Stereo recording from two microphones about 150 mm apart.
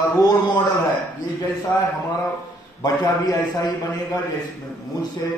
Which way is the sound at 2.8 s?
25° left (ahead or behind).